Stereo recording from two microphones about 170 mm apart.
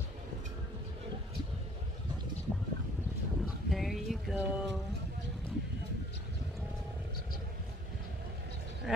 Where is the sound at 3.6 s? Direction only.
Centre (ahead or behind).